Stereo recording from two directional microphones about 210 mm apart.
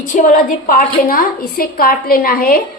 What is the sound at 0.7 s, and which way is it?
A woman's voice, 45° left (ahead or behind).